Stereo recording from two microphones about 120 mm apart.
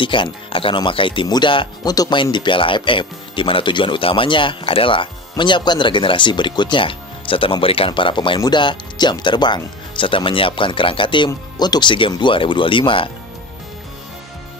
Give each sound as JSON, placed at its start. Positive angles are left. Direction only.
{"t": 0.0, "sound": "speech", "side_deg": 45}